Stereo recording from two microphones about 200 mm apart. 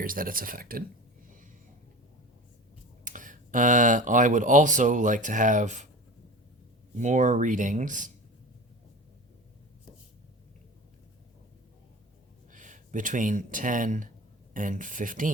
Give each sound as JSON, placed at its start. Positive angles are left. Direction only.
{"t": 0.0, "sound": "speech", "side_deg": -45}
{"t": 3.0, "sound": "speech", "side_deg": -40}
{"t": 6.9, "sound": "speech", "side_deg": -40}
{"t": 12.5, "sound": "speech", "side_deg": -40}